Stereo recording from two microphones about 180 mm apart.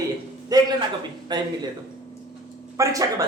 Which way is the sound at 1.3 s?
25° right (ahead or behind).